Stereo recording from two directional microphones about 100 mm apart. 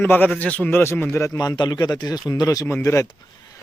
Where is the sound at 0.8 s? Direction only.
25° left (ahead or behind).